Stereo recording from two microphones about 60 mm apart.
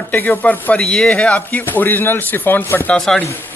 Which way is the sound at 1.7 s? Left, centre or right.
Left.